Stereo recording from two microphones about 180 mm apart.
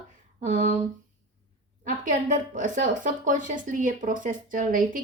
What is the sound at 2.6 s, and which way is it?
Speech, 45° right (ahead or behind).